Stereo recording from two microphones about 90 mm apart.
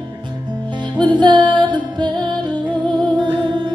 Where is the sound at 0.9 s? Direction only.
55° right (ahead or behind).